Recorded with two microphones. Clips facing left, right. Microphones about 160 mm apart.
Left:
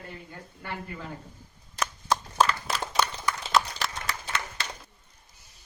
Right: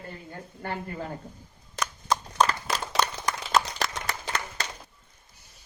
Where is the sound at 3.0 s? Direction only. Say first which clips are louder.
Right 1 dB; 40° right (ahead or behind).